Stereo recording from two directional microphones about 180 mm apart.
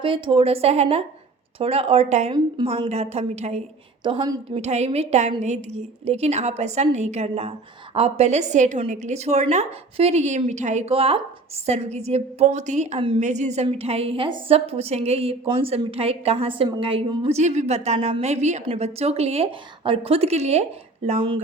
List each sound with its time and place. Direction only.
0.0 s a woman's voice: 30° right (ahead or behind)
4.0 s a woman's voice: 25° right (ahead or behind)